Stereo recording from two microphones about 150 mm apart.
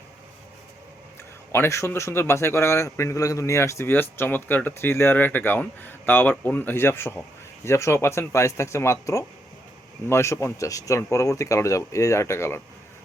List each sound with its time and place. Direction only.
1.5 s a man's voice: 20° left (ahead or behind)